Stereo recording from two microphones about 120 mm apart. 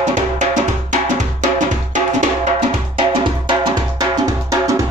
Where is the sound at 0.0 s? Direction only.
75° right (ahead or behind).